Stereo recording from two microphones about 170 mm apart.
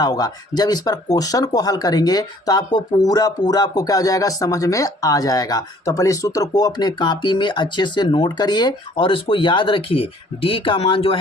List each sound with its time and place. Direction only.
0.0 s speech: 20° left (ahead or behind)